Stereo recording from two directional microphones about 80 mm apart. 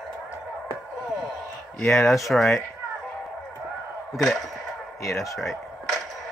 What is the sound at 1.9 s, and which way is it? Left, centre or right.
Speech, centre.